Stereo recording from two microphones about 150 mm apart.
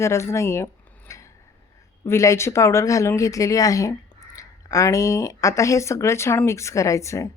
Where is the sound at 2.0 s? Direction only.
20° left (ahead or behind).